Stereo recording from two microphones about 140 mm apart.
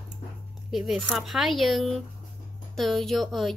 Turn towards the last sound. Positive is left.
turn(degrees=0)  # may be behind; listen again after turning